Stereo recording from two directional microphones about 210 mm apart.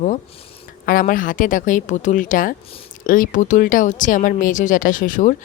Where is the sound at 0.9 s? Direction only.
40° left (ahead or behind).